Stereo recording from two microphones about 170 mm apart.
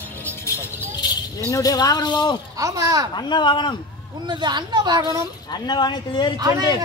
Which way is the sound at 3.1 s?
25° left (ahead or behind).